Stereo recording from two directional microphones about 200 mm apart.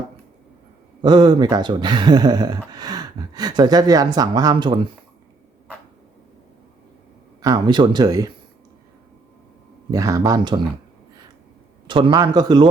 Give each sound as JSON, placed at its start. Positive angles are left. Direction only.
{"t": 1.0, "sound": "speech", "side_deg": -20}
{"t": 7.4, "sound": "speech", "side_deg": -20}
{"t": 9.9, "sound": "speech", "side_deg": -15}
{"t": 11.9, "sound": "speech", "side_deg": -25}